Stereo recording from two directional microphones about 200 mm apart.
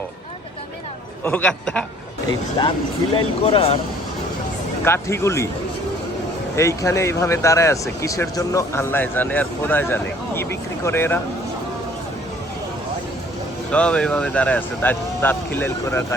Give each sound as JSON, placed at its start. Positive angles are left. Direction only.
{"t": 1.2, "sound": "speech", "side_deg": 10}
{"t": 2.6, "sound": "speech", "side_deg": 20}
{"t": 4.9, "sound": "speech", "side_deg": 15}
{"t": 6.6, "sound": "speech", "side_deg": 15}
{"t": 13.7, "sound": "speech", "side_deg": 5}